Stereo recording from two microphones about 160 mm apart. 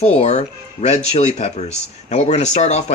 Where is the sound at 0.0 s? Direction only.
45° left (ahead or behind).